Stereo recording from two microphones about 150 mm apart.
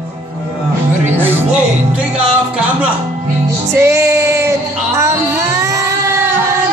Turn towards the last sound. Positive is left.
turn(degrees=-20)  # may be behind; listen again after turning